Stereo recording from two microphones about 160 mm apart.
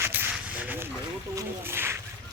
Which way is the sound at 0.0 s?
10° right (ahead or behind).